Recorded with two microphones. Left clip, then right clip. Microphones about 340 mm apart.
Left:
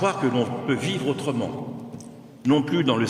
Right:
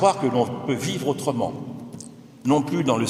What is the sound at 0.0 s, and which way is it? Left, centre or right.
A man's voice, centre.